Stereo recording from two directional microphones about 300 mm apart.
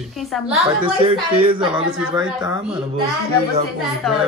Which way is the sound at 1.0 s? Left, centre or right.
Centre.